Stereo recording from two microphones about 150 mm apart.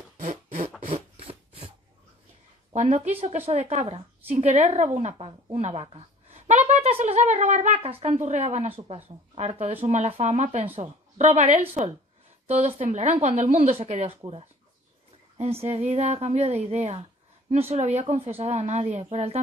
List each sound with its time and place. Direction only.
0.9 s a sound: 40° right (ahead or behind)
2.7 s a woman's voice: 50° right (ahead or behind)
15.6 s speech: 45° right (ahead or behind)